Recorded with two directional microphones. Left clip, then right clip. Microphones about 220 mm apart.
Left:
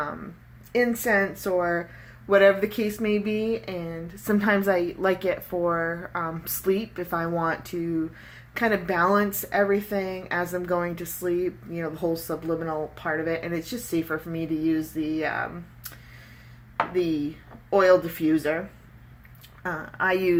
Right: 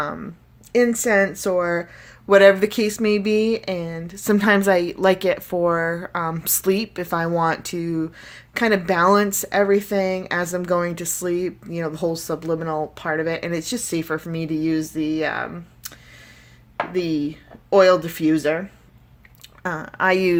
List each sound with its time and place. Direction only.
0.7 s speech: 50° right (ahead or behind)
17.7 s speech: 55° right (ahead or behind)
19.6 s speech: 55° right (ahead or behind)